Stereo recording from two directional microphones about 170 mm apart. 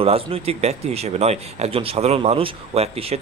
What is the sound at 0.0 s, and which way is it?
Speech, 35° right (ahead or behind).